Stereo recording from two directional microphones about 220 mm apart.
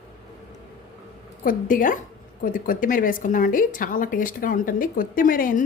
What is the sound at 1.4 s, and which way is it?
A woman's voice, 40° left (ahead or behind).